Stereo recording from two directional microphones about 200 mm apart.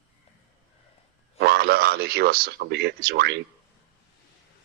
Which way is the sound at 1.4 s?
55° right (ahead or behind).